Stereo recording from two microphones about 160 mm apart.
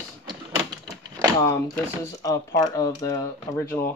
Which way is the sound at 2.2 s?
20° left (ahead or behind).